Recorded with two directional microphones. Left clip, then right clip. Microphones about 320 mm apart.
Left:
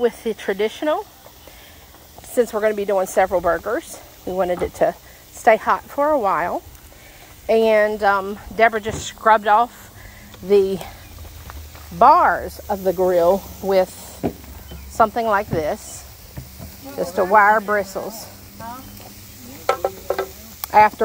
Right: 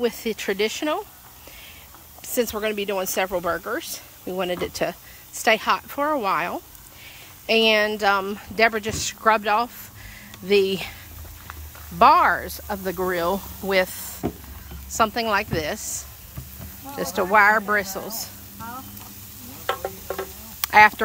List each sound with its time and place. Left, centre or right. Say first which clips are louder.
0.0 s speech: left 4 dB; centre
2.3 s speech: left 6 dB; centre
12.0 s speech: left 3 dB; centre
15.0 s speech: left 4 dB; centre
17.0 s speech: left 3 dB; centre
20.6 s speech: left 1 dB; centre